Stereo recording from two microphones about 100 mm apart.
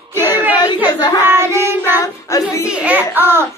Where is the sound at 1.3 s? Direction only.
25° right (ahead or behind).